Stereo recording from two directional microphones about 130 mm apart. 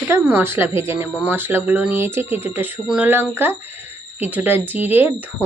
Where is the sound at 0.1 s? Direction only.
15° right (ahead or behind).